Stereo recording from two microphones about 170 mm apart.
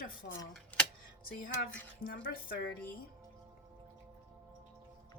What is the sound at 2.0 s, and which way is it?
Speech, 60° left (ahead or behind).